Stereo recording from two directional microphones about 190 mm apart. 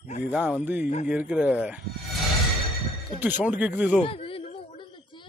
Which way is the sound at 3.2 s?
10° right (ahead or behind).